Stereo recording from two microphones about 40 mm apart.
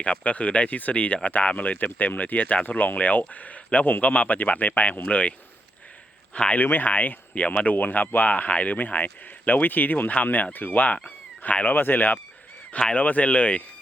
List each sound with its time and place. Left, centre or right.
0.0 s speech: left
6.3 s speech: left
6.6 s speech: left
10.8 s speech: left
13.0 s speech: left